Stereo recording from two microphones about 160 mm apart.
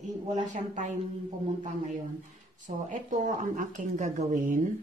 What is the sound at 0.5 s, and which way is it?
Speech, 50° right (ahead or behind).